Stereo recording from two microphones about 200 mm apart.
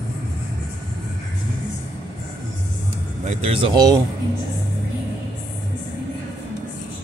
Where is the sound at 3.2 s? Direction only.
30° right (ahead or behind).